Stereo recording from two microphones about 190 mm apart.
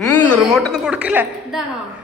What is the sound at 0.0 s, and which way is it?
A woman's voice, 10° left (ahead or behind).